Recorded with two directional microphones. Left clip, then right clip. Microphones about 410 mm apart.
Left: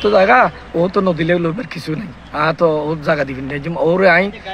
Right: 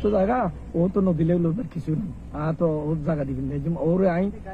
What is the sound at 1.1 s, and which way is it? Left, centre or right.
A man's voice, centre.